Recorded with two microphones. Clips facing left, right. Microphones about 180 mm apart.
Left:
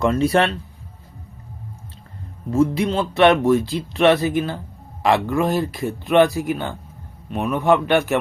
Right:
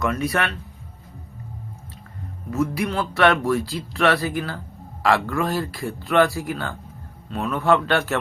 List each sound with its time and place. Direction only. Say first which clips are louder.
0.0 s speech: left 6 dB; 30° left (ahead or behind)
2.5 s a man's voice: left 5 dB; 25° left (ahead or behind)